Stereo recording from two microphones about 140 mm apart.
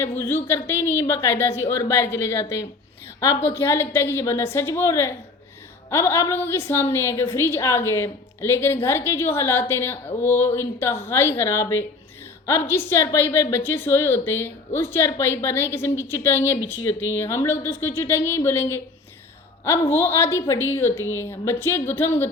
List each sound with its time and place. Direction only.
0.0 s a woman's voice: 15° left (ahead or behind)